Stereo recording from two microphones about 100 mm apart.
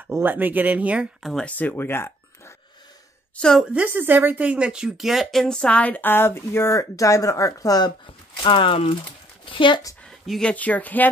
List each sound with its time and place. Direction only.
0.1 s speech: 20° right (ahead or behind)
1.2 s speech: 5° left (ahead or behind)
1.6 s a sound: 20° left (ahead or behind)
3.3 s speech: 5° left (ahead or behind)
3.7 s speech: 20° right (ahead or behind); by 7.9 s 40° left (ahead or behind)
8.4 s speech: 60° left (ahead or behind)
10.0 s a sound: 5° left (ahead or behind)
10.5 s speech: 15° left (ahead or behind)